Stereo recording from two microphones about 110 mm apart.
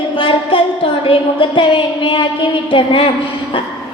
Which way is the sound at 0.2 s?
55° left (ahead or behind).